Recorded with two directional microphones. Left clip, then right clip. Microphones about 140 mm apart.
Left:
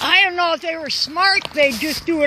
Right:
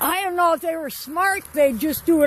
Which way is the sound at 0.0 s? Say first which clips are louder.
Left 4 dB; 25° right (ahead or behind).